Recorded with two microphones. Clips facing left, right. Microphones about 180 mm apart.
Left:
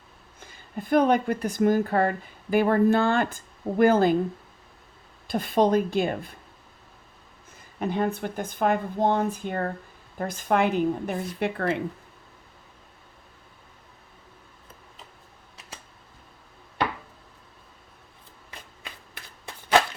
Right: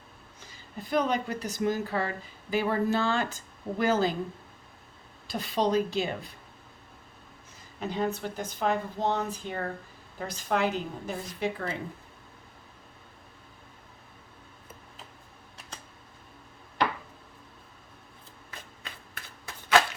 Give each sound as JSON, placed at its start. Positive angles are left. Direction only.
{"t": 0.3, "sound": "a woman's voice", "side_deg": 55}
{"t": 5.3, "sound": "speech", "side_deg": 50}
{"t": 7.8, "sound": "a woman's voice", "side_deg": 55}